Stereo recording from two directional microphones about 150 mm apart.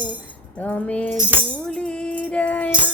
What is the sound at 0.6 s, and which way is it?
Keys jangling, 10° left (ahead or behind).